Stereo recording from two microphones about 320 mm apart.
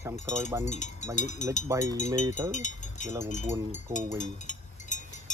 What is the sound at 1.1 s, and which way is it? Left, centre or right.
Speech, left.